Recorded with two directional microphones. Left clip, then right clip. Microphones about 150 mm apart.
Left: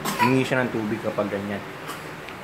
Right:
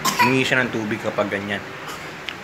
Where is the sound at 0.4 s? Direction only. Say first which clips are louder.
Right 4 dB; 15° left (ahead or behind).